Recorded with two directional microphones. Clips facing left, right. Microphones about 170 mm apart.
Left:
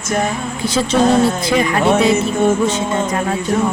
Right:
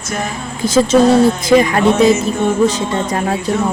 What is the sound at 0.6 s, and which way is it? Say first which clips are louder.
Speech: right 6 dB; 45° right (ahead or behind).